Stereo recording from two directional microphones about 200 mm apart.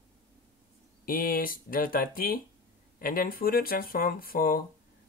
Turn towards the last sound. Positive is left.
turn(degrees=45)  # may be behind; listen again after turning